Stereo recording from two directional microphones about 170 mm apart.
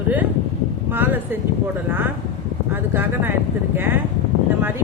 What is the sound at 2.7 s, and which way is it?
Speech, 10° right (ahead or behind).